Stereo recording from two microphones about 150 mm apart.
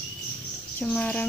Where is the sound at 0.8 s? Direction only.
10° left (ahead or behind).